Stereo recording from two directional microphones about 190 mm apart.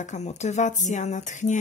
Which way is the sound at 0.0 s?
35° left (ahead or behind).